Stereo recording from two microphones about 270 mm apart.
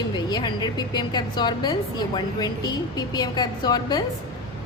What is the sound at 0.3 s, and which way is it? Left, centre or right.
A woman's voice, centre.